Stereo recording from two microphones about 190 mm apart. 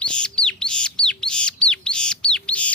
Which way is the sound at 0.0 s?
5° left (ahead or behind).